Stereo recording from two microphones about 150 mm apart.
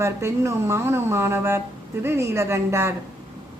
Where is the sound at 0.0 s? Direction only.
20° right (ahead or behind).